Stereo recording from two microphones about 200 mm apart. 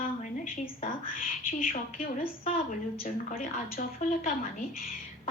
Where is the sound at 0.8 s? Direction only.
45° left (ahead or behind).